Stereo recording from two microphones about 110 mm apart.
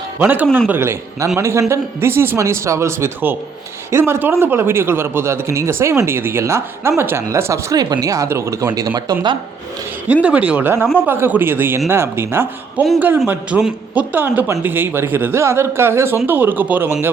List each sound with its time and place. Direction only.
0.2 s a man's voice: 15° right (ahead or behind); by 9.3 s 40° right (ahead or behind)
10.1 s a man's voice: 10° right (ahead or behind)